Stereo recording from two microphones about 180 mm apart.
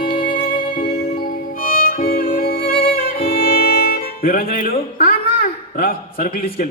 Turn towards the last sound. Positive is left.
turn(degrees=55)  # may be behind; listen again after turning